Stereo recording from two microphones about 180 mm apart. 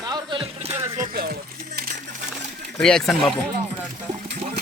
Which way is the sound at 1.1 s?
55° right (ahead or behind).